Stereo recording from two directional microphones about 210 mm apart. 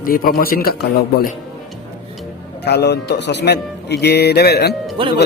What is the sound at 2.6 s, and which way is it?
Speech, 50° left (ahead or behind).